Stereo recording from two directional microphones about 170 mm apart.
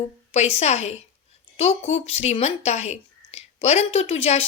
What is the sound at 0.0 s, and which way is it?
A woman's voice, 40° left (ahead or behind).